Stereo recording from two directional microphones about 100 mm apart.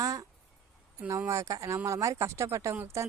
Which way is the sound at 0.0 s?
35° right (ahead or behind).